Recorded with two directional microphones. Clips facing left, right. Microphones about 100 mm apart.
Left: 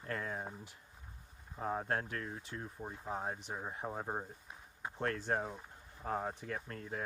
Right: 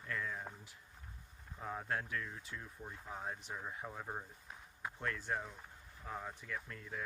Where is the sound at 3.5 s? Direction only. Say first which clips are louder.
Left 3 dB; 25° left (ahead or behind).